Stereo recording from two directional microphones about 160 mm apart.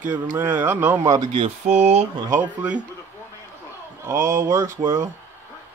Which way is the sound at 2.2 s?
20° right (ahead or behind).